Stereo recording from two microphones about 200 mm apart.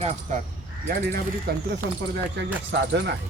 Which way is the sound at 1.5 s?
55° right (ahead or behind).